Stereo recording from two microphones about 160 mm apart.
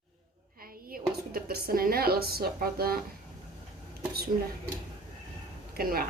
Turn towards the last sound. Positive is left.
turn(degrees=-70)  # may be behind; listen again after turning